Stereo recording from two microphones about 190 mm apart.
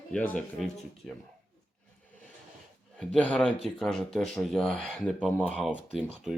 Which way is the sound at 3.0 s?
5° left (ahead or behind).